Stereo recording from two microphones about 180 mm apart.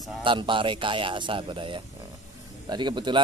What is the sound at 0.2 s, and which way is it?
A man's voice, 30° right (ahead or behind).